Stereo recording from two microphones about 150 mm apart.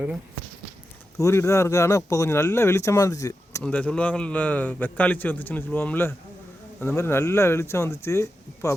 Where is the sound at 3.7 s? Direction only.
10° left (ahead or behind).